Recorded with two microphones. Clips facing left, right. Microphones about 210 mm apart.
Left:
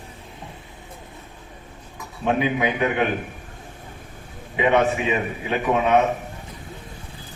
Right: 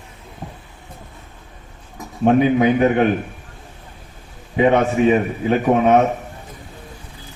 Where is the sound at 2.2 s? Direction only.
45° right (ahead or behind).